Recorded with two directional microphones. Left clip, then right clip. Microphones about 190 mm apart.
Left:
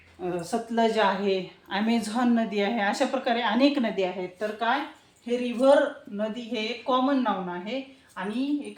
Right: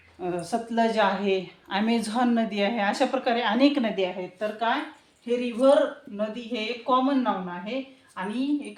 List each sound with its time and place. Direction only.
0.2 s a woman's voice: 15° right (ahead or behind)